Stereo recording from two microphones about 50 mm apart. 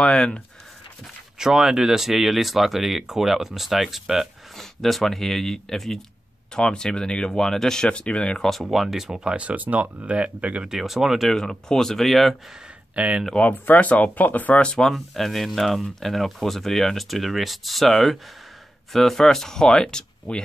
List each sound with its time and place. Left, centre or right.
0.0 s speech: centre
1.4 s speech: centre
4.6 s speech: centre; by 8.5 s left
8.5 s speech: centre
9.2 s speech: centre
9.5 s speech: right
10.7 s speech: centre
11.2 s speech: centre
12.9 s speech: right
13.5 s speech: left
14.6 s speech: centre
14.9 s speech: centre